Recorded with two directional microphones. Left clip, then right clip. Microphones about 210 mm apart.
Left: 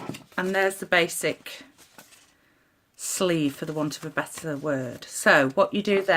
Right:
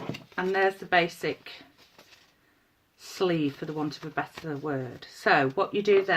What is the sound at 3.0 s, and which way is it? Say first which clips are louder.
Speech: left 3 dB; 45° left (ahead or behind).